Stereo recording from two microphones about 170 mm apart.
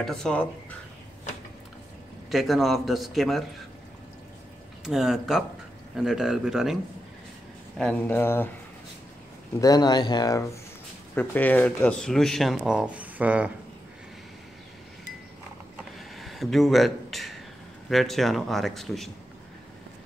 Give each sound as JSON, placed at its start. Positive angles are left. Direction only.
{"t": 0.0, "sound": "speech", "side_deg": 5}
{"t": 2.3, "sound": "speech", "side_deg": 0}
{"t": 4.8, "sound": "speech", "side_deg": 0}
{"t": 9.6, "sound": "speech", "side_deg": 20}
{"t": 11.1, "sound": "speech", "side_deg": 10}
{"t": 15.7, "sound": "a sound", "side_deg": 0}
{"t": 17.8, "sound": "speech", "side_deg": 0}